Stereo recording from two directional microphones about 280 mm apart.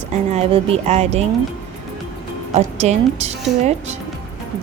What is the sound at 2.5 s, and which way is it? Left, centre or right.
A woman's voice, right.